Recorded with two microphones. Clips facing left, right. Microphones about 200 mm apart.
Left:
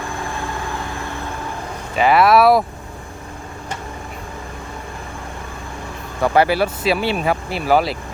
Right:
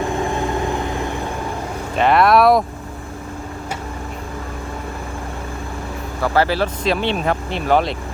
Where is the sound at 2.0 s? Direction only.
5° left (ahead or behind).